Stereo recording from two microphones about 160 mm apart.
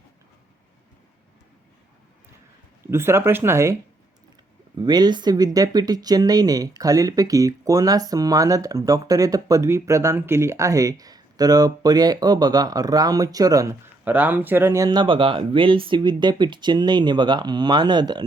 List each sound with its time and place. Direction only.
2.8 s speech: 15° right (ahead or behind)
4.8 s speech: 25° right (ahead or behind)